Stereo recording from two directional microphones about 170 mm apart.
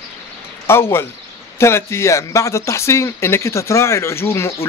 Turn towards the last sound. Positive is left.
turn(degrees=15)  # may be behind; listen again after turning